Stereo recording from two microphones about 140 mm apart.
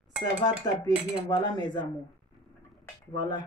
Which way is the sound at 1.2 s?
30° left (ahead or behind).